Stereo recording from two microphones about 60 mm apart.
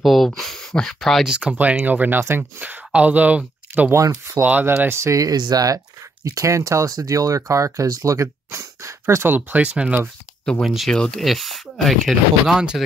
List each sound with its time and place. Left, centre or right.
0.0 s speech: centre
1.4 s speech: centre
1.9 s speech: right
2.1 s speech: right
2.6 s speech: right
3.9 s speech: right
4.4 s speech: right
4.8 s speech: right
5.1 s speech: right
6.2 s speech: right
9.2 s speech: right
10.6 s speech: centre
10.9 s speech: centre